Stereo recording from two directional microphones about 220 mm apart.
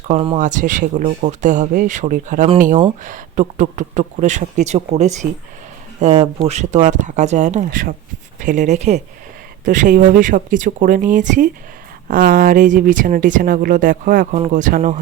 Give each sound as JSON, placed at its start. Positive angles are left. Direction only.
{"t": 0.1, "sound": "speech", "side_deg": -30}